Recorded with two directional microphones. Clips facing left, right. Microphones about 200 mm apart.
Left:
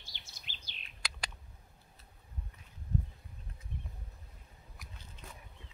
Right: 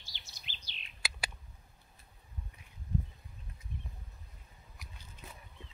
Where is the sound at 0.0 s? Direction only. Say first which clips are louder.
Even; 55° left (ahead or behind).